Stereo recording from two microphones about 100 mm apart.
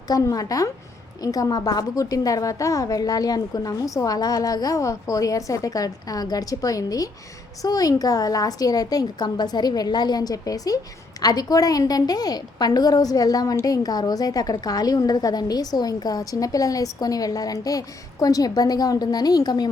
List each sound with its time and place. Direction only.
0.1 s a woman's voice: 35° left (ahead or behind)